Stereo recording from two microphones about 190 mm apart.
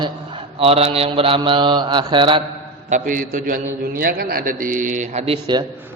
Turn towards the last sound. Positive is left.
turn(degrees=-20)  # may be behind; listen again after turning